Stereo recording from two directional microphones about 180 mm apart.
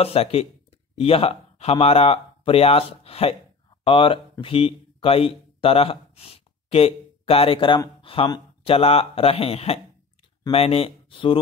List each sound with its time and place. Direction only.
0.0 s speech: 35° left (ahead or behind)